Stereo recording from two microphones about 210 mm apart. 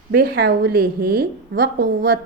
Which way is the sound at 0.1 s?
50° right (ahead or behind).